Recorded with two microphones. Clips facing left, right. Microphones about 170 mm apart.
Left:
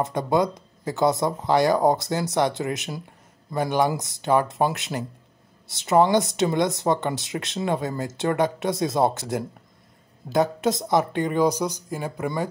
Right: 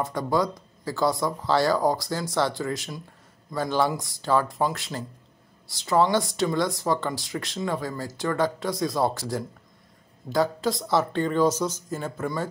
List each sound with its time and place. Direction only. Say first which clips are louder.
0.0 s speech: left 3 dB; 20° left (ahead or behind)